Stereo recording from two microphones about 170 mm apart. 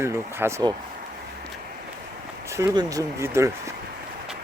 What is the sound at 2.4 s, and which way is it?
Speech, 15° right (ahead or behind).